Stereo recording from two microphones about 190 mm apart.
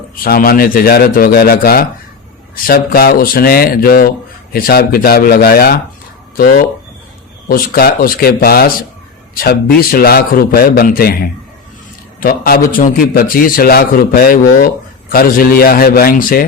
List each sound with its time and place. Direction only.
0.2 s a man's voice: 50° left (ahead or behind)